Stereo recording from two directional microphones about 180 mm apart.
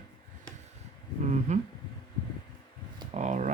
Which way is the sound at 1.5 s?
40° right (ahead or behind).